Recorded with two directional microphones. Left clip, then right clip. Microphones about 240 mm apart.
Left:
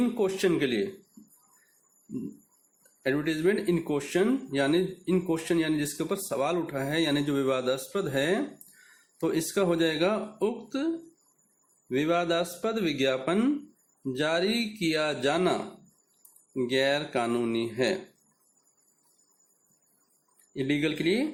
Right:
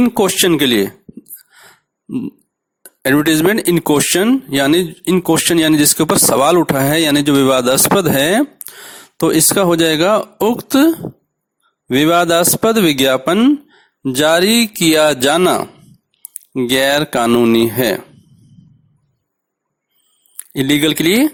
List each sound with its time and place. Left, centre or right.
0.0 s speech: right
3.0 s speech: right
20.3 s speech: right